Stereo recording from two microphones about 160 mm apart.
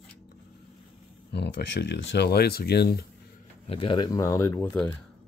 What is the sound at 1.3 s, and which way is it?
Speech, 90° left.